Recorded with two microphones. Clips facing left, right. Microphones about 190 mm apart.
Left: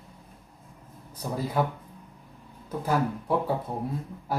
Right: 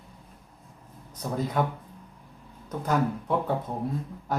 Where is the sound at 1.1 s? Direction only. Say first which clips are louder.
Right 1 dB; 10° left (ahead or behind).